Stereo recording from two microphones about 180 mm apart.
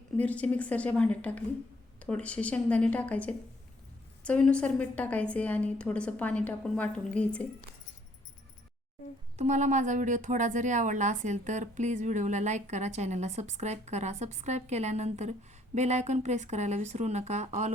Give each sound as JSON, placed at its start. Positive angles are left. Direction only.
{"t": 0.2, "sound": "a woman's voice", "side_deg": 10}
{"t": 9.4, "sound": "a woman's voice", "side_deg": -40}